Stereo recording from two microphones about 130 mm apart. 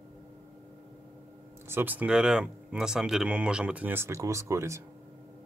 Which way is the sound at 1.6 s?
15° right (ahead or behind).